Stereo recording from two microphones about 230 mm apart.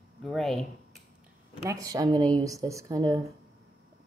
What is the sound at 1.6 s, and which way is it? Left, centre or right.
Speech, centre.